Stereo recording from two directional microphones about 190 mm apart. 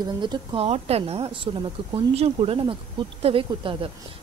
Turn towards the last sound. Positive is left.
turn(degrees=-30)  # may be behind; listen again after turning